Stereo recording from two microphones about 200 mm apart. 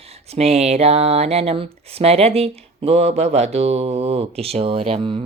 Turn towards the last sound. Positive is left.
turn(degrees=-25)  # may be behind; listen again after turning